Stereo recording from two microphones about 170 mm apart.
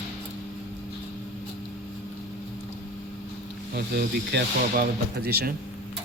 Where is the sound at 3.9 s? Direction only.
75° right (ahead or behind).